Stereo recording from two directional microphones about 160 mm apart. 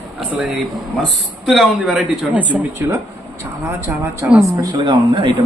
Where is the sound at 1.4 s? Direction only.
Centre (ahead or behind).